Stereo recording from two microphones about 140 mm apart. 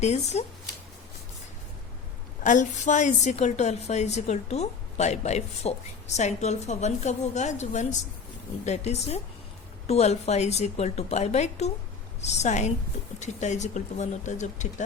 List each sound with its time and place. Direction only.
0.0 s a woman's voice: 50° left (ahead or behind)
2.4 s a woman's voice: 60° left (ahead or behind)